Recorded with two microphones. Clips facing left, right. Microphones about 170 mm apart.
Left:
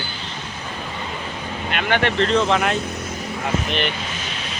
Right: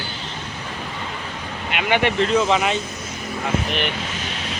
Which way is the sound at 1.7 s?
10° right (ahead or behind).